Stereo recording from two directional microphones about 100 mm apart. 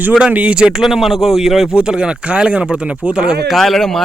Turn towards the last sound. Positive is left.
turn(degrees=5)  # may be behind; listen again after turning